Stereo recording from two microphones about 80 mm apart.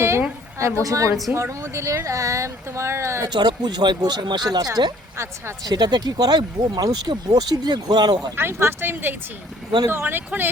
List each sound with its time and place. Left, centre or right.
0.6 s speech: right
3.2 s speech: right
4.4 s speech: right
8.4 s speech: right